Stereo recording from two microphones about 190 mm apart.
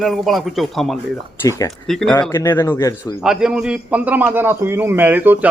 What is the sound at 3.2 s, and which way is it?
A man's voice, 5° right (ahead or behind).